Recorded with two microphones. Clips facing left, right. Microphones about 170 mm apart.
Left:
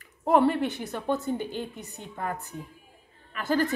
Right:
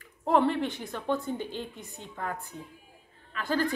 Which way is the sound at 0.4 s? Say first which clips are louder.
Left 3 dB; 5° left (ahead or behind).